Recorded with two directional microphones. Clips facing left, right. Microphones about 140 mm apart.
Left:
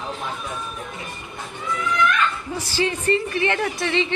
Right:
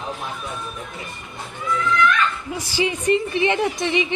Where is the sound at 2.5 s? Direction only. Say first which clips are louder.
Even; 15° right (ahead or behind).